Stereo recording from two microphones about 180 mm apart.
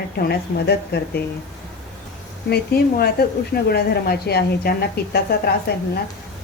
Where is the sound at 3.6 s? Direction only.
60° left (ahead or behind).